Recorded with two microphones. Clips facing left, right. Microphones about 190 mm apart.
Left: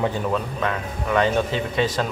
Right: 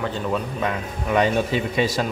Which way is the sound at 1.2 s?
10° right (ahead or behind).